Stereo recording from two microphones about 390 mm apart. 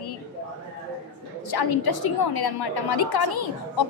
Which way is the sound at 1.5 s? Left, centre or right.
Left.